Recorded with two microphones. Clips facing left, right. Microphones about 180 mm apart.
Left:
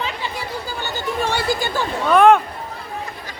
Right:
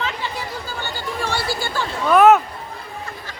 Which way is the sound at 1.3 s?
15° left (ahead or behind).